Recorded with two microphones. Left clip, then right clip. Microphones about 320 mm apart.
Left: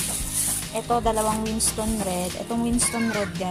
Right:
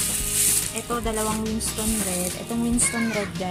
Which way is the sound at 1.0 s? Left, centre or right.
Centre.